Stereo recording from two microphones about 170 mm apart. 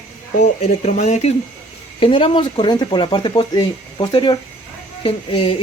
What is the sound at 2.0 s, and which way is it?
Speech, 30° left (ahead or behind).